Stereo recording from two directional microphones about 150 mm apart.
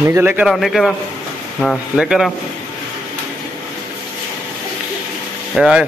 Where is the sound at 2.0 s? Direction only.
5° right (ahead or behind).